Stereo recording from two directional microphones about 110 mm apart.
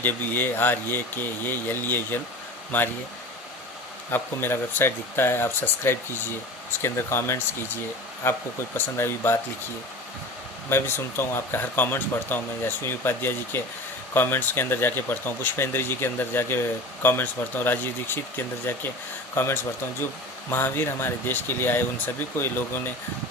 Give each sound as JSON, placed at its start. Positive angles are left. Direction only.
{"t": 0.0, "sound": "speech", "side_deg": 15}
{"t": 4.1, "sound": "speech", "side_deg": 20}
{"t": 10.7, "sound": "speech", "side_deg": 20}